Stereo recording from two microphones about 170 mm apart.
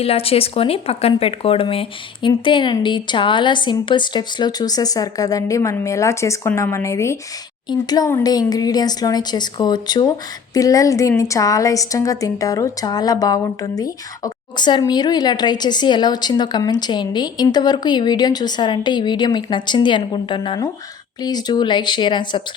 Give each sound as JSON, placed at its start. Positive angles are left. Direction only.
{"t": 0.0, "sound": "a woman's voice", "side_deg": 35}